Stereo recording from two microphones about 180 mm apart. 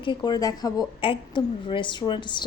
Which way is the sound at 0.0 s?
25° left (ahead or behind).